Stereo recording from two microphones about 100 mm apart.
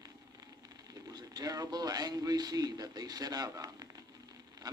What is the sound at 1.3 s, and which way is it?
A man's voice, 40° right (ahead or behind).